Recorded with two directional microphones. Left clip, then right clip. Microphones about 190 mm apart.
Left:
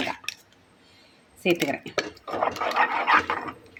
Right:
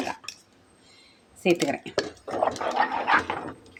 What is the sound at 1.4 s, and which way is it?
Speech, 5° right (ahead or behind).